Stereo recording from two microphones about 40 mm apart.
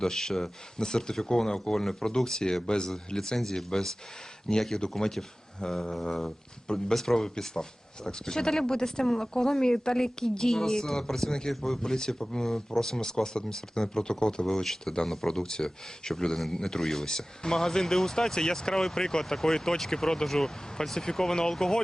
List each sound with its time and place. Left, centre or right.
0.0 s speech: centre